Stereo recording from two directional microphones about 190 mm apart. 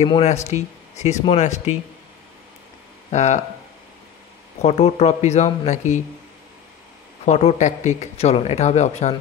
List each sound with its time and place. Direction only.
0.0 s speech: 35° left (ahead or behind)
3.1 s speech: 35° left (ahead or behind)
4.6 s speech: 35° left (ahead or behind)
7.2 s speech: 35° left (ahead or behind)